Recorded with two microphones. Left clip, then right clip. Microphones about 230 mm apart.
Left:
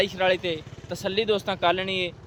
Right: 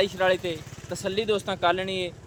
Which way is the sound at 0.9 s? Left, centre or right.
Left.